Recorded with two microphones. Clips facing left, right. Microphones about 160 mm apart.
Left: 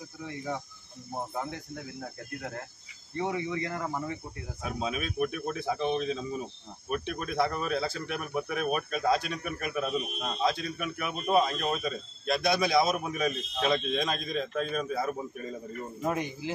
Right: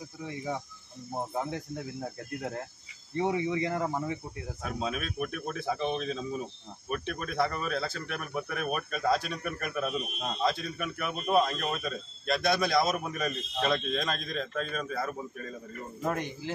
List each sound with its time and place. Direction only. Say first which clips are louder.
3.2 s speech: right 3 dB; 20° right (ahead or behind)
4.6 s speech: left 1 dB; 5° left (ahead or behind)